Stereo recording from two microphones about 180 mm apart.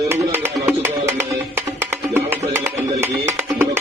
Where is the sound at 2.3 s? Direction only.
10° right (ahead or behind).